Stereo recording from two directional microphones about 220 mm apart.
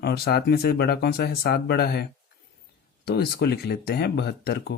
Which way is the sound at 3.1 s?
45° left (ahead or behind).